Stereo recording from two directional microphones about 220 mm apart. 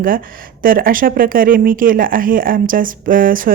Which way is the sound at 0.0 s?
40° right (ahead or behind).